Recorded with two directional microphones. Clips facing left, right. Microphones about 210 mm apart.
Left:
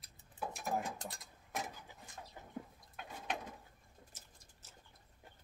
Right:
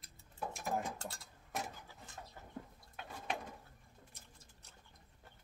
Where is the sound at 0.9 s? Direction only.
15° left (ahead or behind).